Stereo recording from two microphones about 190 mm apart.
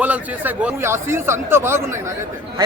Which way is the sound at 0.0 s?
10° right (ahead or behind).